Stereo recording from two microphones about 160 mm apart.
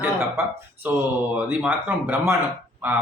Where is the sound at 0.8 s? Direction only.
10° right (ahead or behind).